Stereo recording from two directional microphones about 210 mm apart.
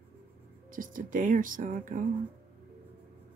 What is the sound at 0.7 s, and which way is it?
Speech, 40° right (ahead or behind).